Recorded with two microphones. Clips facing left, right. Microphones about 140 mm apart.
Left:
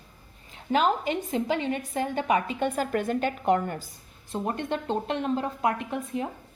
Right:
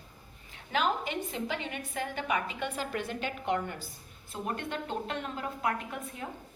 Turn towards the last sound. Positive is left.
turn(degrees=25)  # may be behind; listen again after turning